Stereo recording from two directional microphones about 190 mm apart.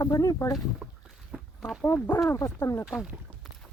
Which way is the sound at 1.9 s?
5° left (ahead or behind).